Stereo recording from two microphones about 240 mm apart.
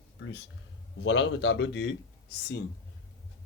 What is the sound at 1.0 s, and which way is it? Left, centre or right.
Speech, left.